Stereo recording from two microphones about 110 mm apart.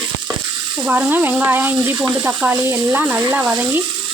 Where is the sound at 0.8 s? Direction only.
15° right (ahead or behind).